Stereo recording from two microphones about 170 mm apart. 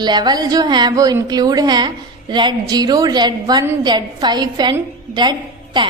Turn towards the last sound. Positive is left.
turn(degrees=-25)  # may be behind; listen again after turning